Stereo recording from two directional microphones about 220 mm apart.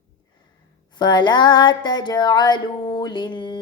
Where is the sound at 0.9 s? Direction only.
20° left (ahead or behind).